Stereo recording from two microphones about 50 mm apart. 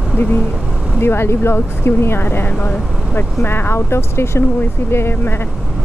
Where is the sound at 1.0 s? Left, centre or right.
Left.